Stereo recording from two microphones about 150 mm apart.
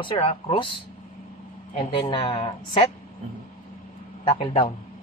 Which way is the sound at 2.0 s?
35° left (ahead or behind).